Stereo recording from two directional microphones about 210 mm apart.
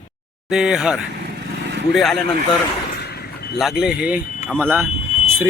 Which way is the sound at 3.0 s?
50° left (ahead or behind).